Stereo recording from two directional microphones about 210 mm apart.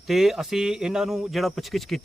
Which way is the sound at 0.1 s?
Centre (ahead or behind).